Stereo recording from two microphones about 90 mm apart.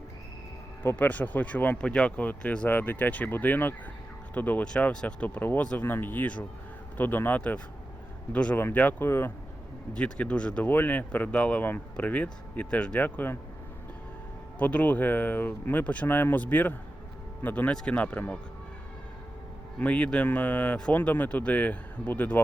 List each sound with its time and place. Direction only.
0.8 s speech: 20° left (ahead or behind)
9.9 s speech: 15° left (ahead or behind)
14.6 s speech: 15° left (ahead or behind)
19.8 s speech: 15° left (ahead or behind)